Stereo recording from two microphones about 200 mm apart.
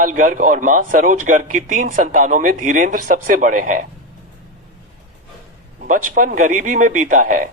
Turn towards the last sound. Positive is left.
turn(degrees=-45)  # may be behind; listen again after turning